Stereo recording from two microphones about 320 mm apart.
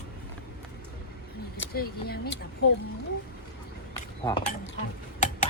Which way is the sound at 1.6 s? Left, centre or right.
Left.